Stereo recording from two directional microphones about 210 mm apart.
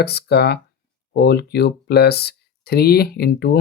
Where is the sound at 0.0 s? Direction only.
50° left (ahead or behind).